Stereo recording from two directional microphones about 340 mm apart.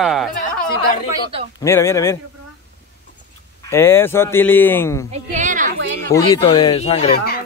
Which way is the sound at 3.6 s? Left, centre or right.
Centre.